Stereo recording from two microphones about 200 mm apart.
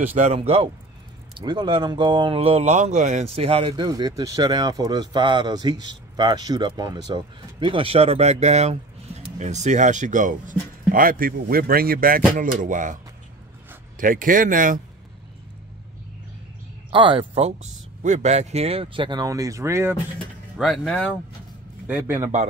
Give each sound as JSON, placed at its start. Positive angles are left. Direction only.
{"t": 0.0, "sound": "speech", "side_deg": -35}
{"t": 16.9, "sound": "speech", "side_deg": -25}
{"t": 20.5, "sound": "speech", "side_deg": 0}
{"t": 21.8, "sound": "a man's voice", "side_deg": -10}